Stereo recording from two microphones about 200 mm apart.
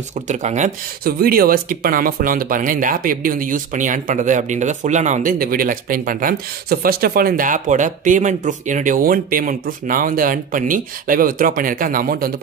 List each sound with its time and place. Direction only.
0.1 s speech: 35° right (ahead or behind)